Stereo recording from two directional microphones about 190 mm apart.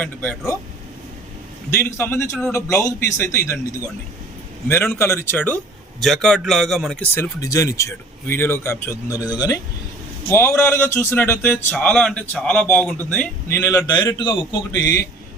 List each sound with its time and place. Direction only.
0.0 s speech: 10° left (ahead or behind)
1.8 s speech: 10° left (ahead or behind)